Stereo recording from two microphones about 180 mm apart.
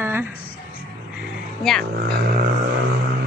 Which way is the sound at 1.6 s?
Centre (ahead or behind).